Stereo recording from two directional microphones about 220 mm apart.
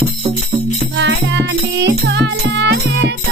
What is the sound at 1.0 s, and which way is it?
Music, 50° right (ahead or behind).